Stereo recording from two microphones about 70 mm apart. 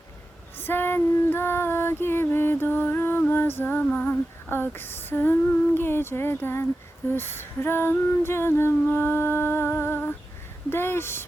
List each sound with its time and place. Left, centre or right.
0.5 s female singing: left